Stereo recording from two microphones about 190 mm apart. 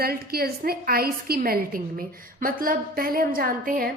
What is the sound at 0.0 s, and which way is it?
A woman's voice, 55° right (ahead or behind).